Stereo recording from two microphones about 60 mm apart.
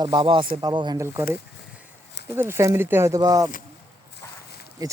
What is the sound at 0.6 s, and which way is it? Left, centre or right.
Speech, right.